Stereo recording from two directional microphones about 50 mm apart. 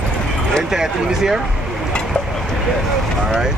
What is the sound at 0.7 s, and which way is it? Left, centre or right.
Speech, centre.